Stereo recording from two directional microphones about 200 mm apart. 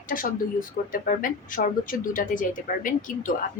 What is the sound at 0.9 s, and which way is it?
Speech, 40° left (ahead or behind).